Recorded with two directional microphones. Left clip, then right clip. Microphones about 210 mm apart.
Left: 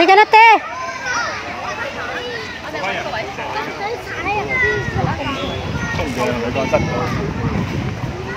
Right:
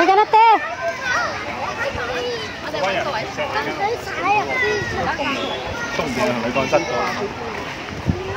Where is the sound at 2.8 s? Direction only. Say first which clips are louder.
Right 1 dB; 50° right (ahead or behind).